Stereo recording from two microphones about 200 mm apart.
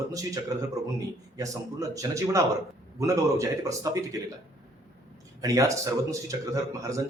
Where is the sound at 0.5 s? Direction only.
15° right (ahead or behind).